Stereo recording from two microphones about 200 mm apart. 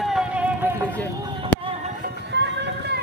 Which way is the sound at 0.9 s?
10° left (ahead or behind).